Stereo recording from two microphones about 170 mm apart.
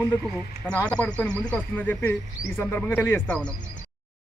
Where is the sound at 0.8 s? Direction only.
5° left (ahead or behind).